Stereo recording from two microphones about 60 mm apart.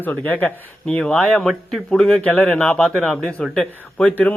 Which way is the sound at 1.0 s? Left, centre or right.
Centre.